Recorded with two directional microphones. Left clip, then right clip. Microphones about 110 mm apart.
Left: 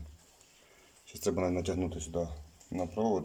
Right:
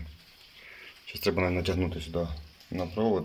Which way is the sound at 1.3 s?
20° left (ahead or behind).